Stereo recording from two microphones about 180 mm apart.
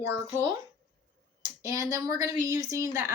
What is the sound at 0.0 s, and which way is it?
Speech, 15° right (ahead or behind).